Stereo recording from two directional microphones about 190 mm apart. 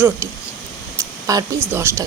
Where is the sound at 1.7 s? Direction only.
15° right (ahead or behind).